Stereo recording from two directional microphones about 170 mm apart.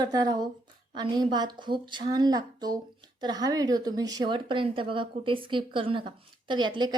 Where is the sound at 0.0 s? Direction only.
25° right (ahead or behind).